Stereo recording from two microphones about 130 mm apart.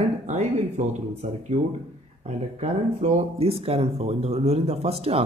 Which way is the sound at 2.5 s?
55° right (ahead or behind).